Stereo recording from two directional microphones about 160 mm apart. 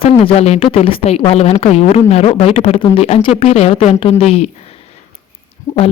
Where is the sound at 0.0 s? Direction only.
40° left (ahead or behind).